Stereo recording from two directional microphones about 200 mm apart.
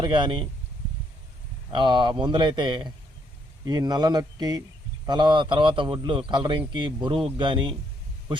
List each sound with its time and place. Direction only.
0.0 s a man's voice: 25° right (ahead or behind)
1.7 s a man's voice: 25° right (ahead or behind)